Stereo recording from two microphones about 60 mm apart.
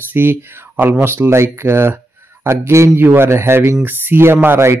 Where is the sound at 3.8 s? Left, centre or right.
Right.